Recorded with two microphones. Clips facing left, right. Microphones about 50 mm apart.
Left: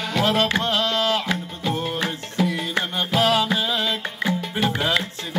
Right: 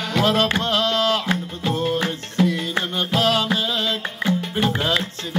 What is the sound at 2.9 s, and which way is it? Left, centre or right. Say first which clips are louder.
Music: left 1 dB; centre.